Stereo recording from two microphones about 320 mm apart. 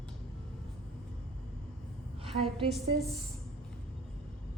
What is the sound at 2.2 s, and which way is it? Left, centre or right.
Speech, centre.